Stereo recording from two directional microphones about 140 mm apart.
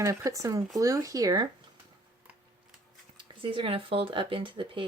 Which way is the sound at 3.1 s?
35° right (ahead or behind).